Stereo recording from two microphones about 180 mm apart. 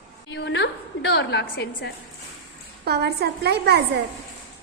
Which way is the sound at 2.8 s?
65° right (ahead or behind).